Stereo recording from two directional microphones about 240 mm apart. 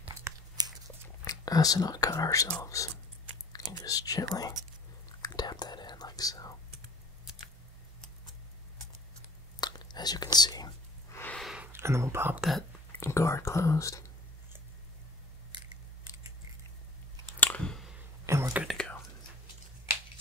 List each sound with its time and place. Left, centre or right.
0.0 s a sound: centre
1.2 s speech: centre
5.0 s whispering: centre
9.6 s whispering: centre
13.0 s speech: centre
17.4 s chewing: centre
18.2 s whispering: centre